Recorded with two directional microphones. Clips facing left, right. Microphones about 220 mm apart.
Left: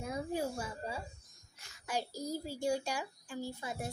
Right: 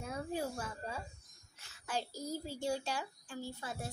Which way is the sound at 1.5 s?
10° left (ahead or behind).